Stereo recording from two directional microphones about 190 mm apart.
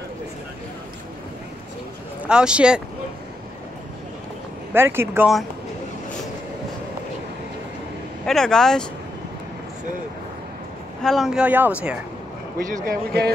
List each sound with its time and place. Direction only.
2.2 s speech: 5° right (ahead or behind)
4.7 s speech: 15° right (ahead or behind)
8.3 s speech: centre (ahead or behind)
11.0 s speech: centre (ahead or behind)
12.5 s speech: 50° right (ahead or behind)